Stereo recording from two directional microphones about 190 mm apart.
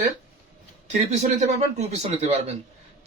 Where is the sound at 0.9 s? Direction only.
35° right (ahead or behind).